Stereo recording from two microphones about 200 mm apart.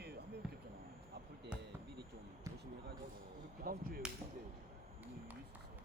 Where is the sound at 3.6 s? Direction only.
45° right (ahead or behind).